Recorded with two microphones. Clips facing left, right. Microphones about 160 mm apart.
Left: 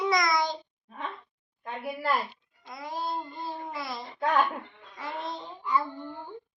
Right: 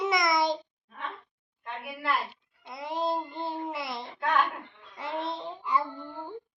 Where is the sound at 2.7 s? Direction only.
25° right (ahead or behind).